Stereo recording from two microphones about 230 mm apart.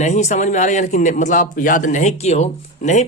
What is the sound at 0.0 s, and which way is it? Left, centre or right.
Speech, left.